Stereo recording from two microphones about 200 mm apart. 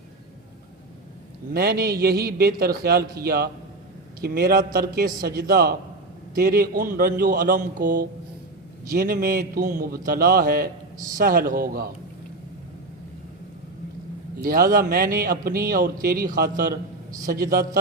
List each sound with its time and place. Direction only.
1.5 s speech: 50° right (ahead or behind)
14.3 s speech: 45° right (ahead or behind)